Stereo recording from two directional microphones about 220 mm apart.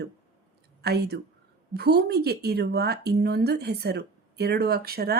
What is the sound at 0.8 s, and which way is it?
Speech, 45° right (ahead or behind).